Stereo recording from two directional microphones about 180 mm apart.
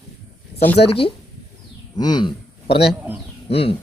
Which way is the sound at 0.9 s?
30° left (ahead or behind).